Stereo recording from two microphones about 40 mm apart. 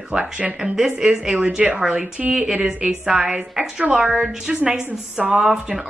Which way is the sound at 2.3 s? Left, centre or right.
Centre.